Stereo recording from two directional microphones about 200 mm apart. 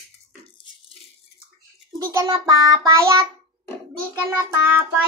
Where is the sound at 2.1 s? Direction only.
15° right (ahead or behind).